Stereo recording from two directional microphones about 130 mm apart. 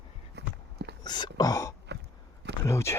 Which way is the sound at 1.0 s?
35° left (ahead or behind).